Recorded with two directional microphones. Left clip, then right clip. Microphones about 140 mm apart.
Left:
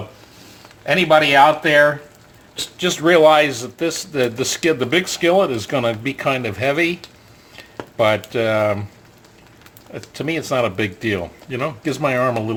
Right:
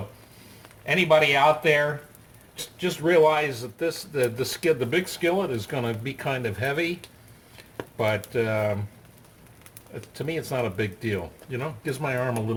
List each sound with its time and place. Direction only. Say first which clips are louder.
0.9 s speech: left 6 dB; 40° left (ahead or behind)
2.7 s a man's voice: left 6 dB; 45° left (ahead or behind)
7.9 s speech: left 8 dB; 40° left (ahead or behind)
10.2 s a man's voice: left 9 dB; 45° left (ahead or behind)